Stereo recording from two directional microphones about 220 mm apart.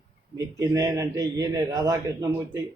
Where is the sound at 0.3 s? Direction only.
15° right (ahead or behind).